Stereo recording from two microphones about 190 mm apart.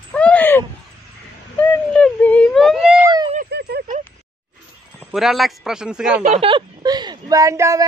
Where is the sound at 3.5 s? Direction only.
60° right (ahead or behind).